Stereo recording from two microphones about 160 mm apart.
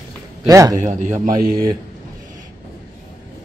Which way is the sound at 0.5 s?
20° right (ahead or behind).